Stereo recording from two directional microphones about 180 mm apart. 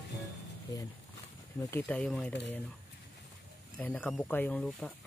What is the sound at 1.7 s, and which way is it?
Speech, 10° left (ahead or behind).